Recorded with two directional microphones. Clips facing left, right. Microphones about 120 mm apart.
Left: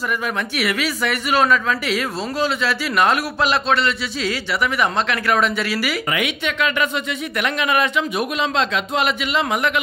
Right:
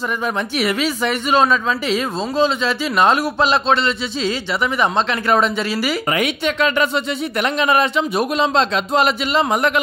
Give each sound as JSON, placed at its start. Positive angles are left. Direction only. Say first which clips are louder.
{"t": 0.2, "sound": "speech", "louder": "right 3 dB", "side_deg": -25}